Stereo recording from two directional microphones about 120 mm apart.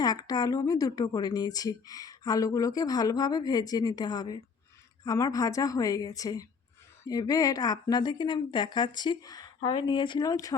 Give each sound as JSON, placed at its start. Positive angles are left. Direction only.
{"t": 0.0, "sound": "a woman's voice", "side_deg": 35}